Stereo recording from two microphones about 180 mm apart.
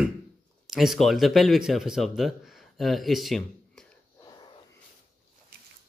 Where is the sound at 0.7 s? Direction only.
Centre (ahead or behind).